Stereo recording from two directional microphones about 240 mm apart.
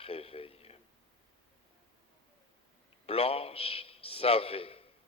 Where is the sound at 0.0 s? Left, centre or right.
Left.